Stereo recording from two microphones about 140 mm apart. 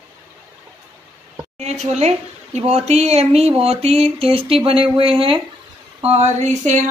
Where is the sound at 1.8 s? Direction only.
50° right (ahead or behind).